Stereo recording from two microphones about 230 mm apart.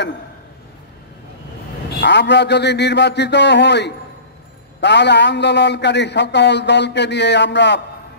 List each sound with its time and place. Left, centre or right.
2.0 s a man's voice: left